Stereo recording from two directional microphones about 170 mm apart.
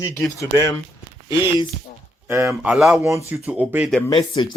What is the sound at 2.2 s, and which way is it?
Speech, 15° right (ahead or behind).